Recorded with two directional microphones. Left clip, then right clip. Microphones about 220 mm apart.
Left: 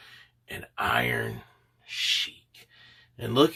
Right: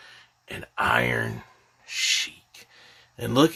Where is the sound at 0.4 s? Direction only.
45° right (ahead or behind).